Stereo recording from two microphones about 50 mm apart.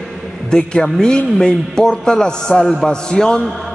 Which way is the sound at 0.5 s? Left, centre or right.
Centre.